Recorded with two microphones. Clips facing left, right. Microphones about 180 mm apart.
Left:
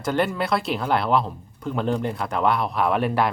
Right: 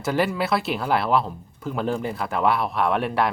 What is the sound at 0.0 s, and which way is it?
Speech, 5° right (ahead or behind).